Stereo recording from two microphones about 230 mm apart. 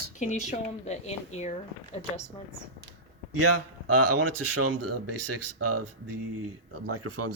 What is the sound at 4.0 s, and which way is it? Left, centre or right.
Speech, right.